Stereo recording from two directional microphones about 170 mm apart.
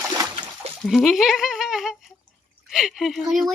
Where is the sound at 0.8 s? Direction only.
Centre (ahead or behind).